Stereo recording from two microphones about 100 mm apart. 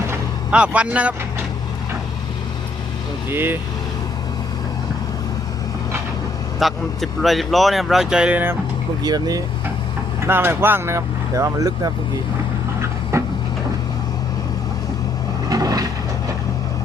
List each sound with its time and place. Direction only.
0.5 s speech: 10° right (ahead or behind)
3.2 s speech: 20° right (ahead or behind)
6.6 s speech: centre (ahead or behind); by 8.5 s 15° right (ahead or behind)
9.0 s speech: 40° right (ahead or behind)
10.2 s speech: 25° right (ahead or behind)
12.8 s a sound: 30° right (ahead or behind)
15.4 s vehicle: 40° right (ahead or behind)